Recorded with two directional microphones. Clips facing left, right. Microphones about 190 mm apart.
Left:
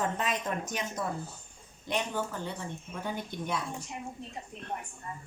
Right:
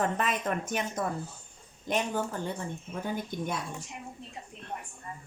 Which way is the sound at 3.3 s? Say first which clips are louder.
Right 1 dB; 50° right (ahead or behind).